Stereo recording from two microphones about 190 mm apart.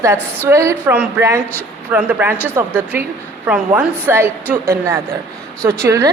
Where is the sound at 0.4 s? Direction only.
15° right (ahead or behind).